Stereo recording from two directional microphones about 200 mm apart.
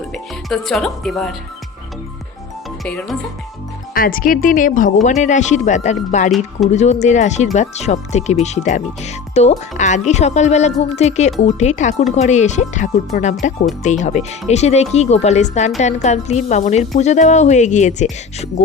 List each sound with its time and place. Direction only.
0.1 s speech: centre (ahead or behind)
2.8 s speech: 5° left (ahead or behind)
3.9 s a woman's voice: 45° left (ahead or behind)